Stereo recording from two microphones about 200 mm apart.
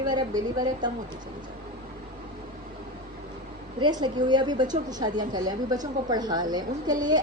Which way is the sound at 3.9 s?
20° right (ahead or behind).